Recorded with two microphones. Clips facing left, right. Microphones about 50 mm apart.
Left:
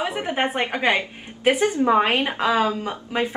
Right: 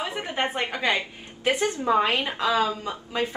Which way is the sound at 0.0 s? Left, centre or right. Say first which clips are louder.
Left 4 dB; left.